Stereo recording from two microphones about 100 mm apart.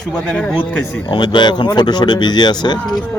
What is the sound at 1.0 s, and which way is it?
Speech, 50° left (ahead or behind).